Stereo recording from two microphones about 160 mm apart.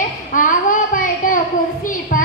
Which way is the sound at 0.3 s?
55° left (ahead or behind).